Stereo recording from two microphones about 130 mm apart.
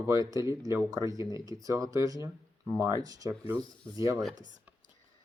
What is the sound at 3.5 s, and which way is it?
Speech, 25° right (ahead or behind).